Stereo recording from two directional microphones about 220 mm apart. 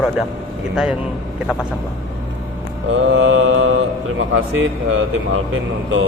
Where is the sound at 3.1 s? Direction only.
65° right (ahead or behind).